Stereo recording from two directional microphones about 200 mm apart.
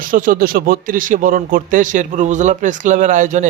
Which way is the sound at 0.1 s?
45° right (ahead or behind).